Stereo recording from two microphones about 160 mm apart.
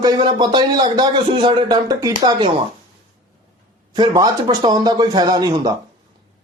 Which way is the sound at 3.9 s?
25° right (ahead or behind).